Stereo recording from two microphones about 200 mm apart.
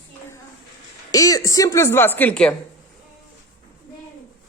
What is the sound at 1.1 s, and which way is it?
Speech, 15° left (ahead or behind).